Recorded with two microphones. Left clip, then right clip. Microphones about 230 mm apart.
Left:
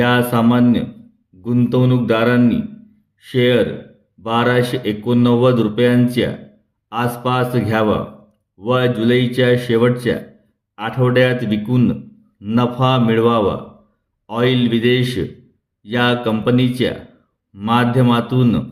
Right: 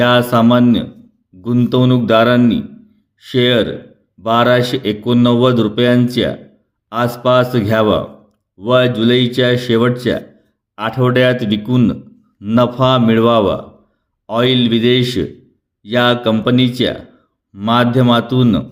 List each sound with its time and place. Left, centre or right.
0.0 s speech: right